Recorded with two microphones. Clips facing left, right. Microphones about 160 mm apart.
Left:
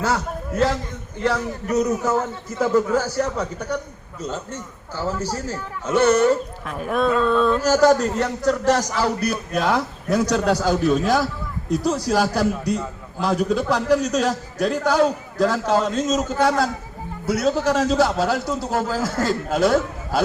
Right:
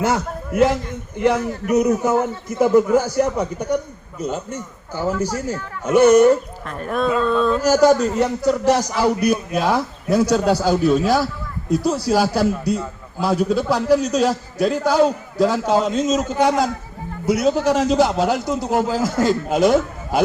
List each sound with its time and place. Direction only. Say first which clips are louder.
0.0 s a man's voice: right 3 dB; 20° right (ahead or behind)
6.7 s a sound: even; centre (ahead or behind)
7.6 s a man's voice: right 4 dB; 10° right (ahead or behind)